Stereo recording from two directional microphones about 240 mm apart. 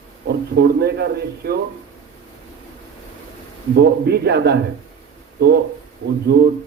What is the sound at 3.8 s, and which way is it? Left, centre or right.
Speech, right.